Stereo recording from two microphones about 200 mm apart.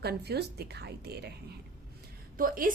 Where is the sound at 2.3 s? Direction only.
45° right (ahead or behind).